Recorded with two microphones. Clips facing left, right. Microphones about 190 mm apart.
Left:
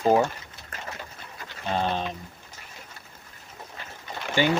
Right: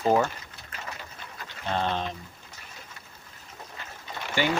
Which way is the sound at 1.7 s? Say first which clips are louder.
Left 1 dB; 10° left (ahead or behind).